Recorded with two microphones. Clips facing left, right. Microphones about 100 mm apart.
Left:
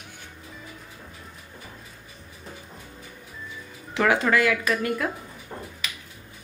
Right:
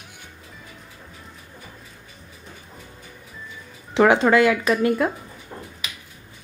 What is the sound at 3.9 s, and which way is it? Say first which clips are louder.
Speech: right 6 dB; 25° right (ahead or behind).